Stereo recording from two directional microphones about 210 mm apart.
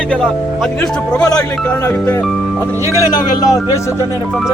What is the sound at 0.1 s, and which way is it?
Speech, centre (ahead or behind).